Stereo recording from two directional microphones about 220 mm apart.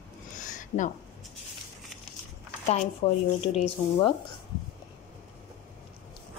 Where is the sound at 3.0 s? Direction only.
25° left (ahead or behind).